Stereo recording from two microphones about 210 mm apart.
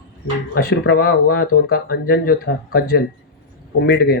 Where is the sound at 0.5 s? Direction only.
50° left (ahead or behind).